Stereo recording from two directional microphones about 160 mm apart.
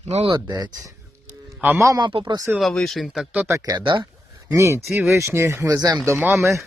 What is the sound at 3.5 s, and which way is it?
Speech, 25° right (ahead or behind).